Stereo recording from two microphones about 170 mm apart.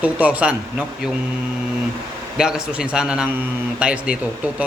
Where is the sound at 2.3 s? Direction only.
5° right (ahead or behind).